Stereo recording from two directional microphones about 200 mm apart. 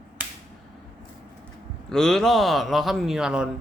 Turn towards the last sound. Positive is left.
turn(degrees=-5)  # may be behind; listen again after turning